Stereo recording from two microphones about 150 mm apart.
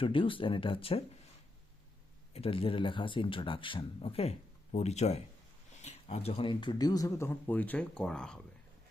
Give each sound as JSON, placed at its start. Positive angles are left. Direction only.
{"t": 0.0, "sound": "speech", "side_deg": 35}
{"t": 2.3, "sound": "speech", "side_deg": 40}